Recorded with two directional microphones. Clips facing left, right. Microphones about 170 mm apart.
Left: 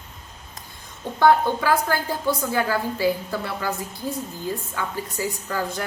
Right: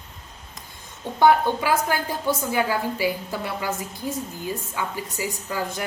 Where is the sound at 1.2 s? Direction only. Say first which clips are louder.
Even; 15° right (ahead or behind).